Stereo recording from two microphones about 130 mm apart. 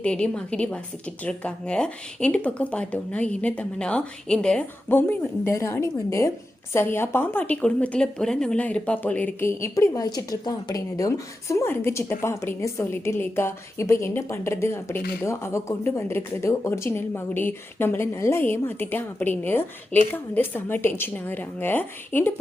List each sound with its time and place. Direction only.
0.0 s a woman's voice: 10° left (ahead or behind)